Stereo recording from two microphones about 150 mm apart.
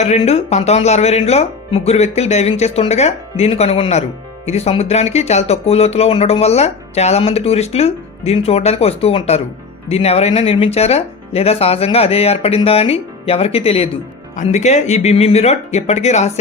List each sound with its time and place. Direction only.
0.0 s speech: 45° left (ahead or behind)